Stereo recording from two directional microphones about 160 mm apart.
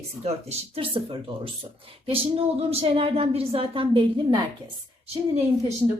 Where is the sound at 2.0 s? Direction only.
35° right (ahead or behind).